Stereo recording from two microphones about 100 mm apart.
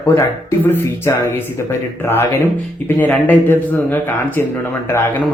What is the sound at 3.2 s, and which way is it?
Speech, 20° left (ahead or behind).